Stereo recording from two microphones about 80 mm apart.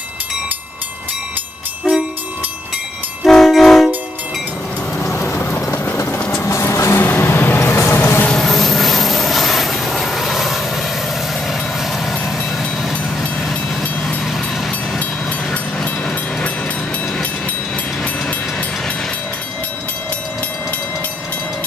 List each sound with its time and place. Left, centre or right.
1.8 s train: centre
3.3 s train: centre
5.1 s train: left
6.4 s vehicle: left
8.3 s vehicle: centre
13.4 s train: centre
15.5 s train: centre